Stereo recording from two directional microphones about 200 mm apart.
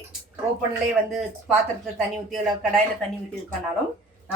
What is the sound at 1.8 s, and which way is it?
Speech, centre (ahead or behind).